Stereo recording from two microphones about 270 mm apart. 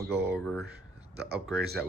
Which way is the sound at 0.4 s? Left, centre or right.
Centre.